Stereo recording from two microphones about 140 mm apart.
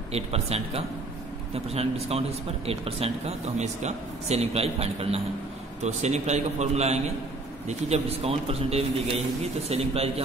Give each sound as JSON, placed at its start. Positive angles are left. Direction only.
{"t": 0.1, "sound": "speech", "side_deg": -45}